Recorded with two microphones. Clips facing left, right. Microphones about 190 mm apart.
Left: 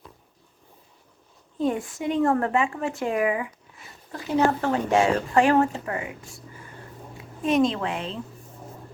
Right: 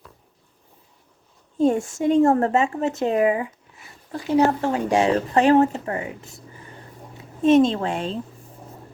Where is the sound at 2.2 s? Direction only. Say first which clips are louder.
Right 3 dB; 25° right (ahead or behind).